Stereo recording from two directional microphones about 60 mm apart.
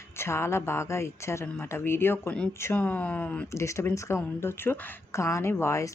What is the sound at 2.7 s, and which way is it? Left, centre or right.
Speech, left.